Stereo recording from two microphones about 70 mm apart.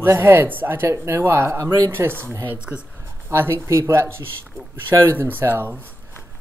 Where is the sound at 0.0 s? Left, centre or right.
Right.